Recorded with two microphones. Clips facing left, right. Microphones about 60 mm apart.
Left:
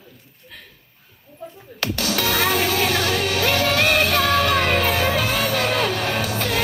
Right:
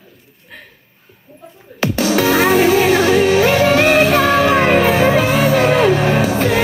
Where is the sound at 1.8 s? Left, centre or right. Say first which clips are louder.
Right 8 dB; right.